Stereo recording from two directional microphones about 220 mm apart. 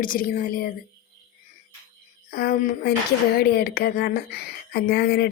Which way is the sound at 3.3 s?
45° left (ahead or behind).